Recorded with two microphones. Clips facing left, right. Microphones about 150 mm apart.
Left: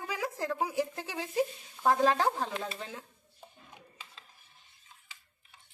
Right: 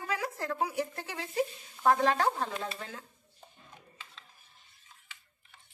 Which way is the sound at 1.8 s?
20° left (ahead or behind).